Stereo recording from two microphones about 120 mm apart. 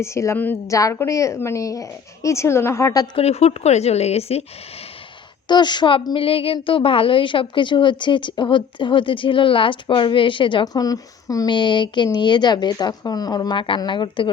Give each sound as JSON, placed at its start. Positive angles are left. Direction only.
{"t": 0.0, "sound": "a woman's voice", "side_deg": 25}
{"t": 3.2, "sound": "a woman's voice", "side_deg": 60}
{"t": 5.5, "sound": "a woman's voice", "side_deg": 40}